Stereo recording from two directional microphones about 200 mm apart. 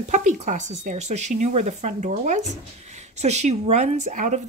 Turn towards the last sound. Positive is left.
turn(degrees=-35)  # may be behind; listen again after turning